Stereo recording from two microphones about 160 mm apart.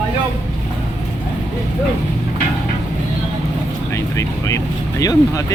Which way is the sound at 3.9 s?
20° left (ahead or behind).